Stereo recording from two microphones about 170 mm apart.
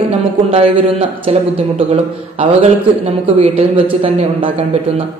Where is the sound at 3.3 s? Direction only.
35° right (ahead or behind).